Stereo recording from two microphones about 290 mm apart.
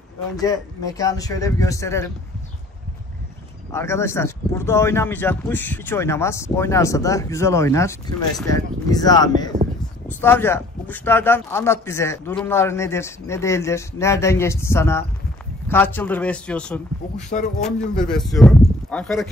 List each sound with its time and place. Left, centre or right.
0.4 s speech: centre
3.7 s speech: centre
17.3 s speech: left
17.6 s speech: centre